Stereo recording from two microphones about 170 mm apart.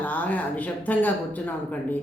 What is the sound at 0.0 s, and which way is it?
Speech, 10° left (ahead or behind).